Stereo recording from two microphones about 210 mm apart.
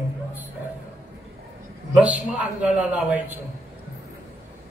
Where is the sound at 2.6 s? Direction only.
5° right (ahead or behind).